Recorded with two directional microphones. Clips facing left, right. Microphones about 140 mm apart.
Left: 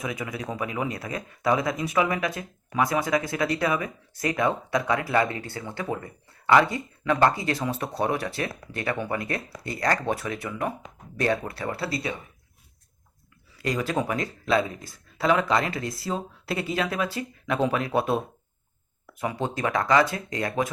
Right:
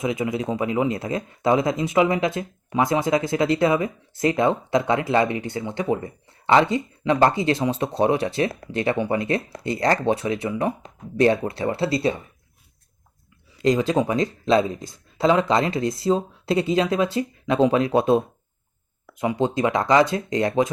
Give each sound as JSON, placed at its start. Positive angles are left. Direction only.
{"t": 0.0, "sound": "speech", "side_deg": -25}
{"t": 13.6, "sound": "speech", "side_deg": -20}
{"t": 19.2, "sound": "speech", "side_deg": -20}